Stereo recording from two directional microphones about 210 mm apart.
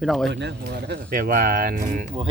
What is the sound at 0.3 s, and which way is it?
Speech, 55° right (ahead or behind).